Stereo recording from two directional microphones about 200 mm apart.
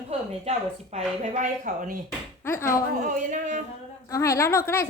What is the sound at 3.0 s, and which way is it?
Speech, 40° right (ahead or behind).